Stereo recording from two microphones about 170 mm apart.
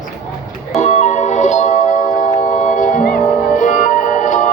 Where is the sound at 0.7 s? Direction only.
40° left (ahead or behind).